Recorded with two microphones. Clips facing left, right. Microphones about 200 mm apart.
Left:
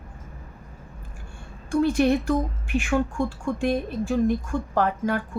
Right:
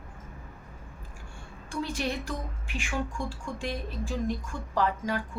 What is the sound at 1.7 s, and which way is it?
A woman's voice, 55° left (ahead or behind).